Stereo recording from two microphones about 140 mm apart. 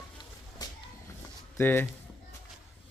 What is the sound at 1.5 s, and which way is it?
Speech, 15° left (ahead or behind).